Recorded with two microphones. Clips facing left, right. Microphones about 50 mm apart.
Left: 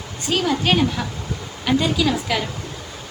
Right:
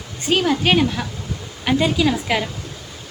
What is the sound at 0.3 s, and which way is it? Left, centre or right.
A woman's voice, right.